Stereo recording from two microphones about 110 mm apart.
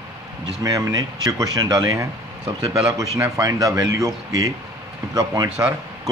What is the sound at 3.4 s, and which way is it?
Speech, 30° right (ahead or behind).